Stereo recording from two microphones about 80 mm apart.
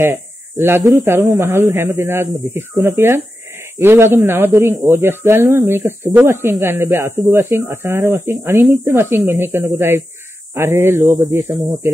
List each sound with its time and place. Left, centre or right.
0.0 s speech: right